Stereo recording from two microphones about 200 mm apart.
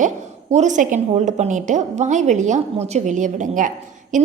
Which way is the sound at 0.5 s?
35° right (ahead or behind).